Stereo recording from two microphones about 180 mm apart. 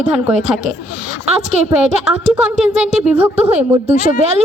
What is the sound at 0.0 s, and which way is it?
Speech, 40° right (ahead or behind).